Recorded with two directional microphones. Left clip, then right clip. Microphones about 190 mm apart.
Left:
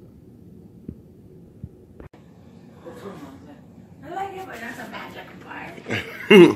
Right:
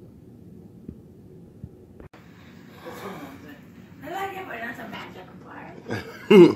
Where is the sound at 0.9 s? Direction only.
Centre (ahead or behind).